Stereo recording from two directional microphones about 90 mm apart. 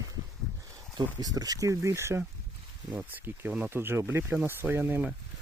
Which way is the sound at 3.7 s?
25° right (ahead or behind).